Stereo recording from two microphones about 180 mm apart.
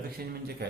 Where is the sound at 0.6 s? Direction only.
65° right (ahead or behind).